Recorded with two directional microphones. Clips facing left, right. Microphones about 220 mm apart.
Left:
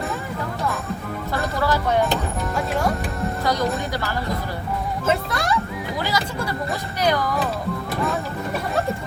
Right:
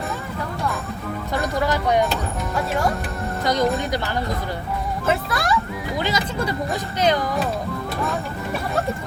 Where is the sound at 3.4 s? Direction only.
20° right (ahead or behind).